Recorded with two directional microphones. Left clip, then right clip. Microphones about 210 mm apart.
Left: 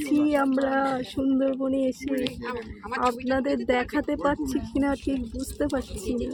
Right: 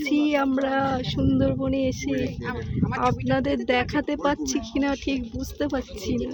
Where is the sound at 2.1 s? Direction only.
50° right (ahead or behind).